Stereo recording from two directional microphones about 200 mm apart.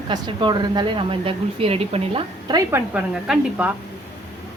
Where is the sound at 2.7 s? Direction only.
5° right (ahead or behind).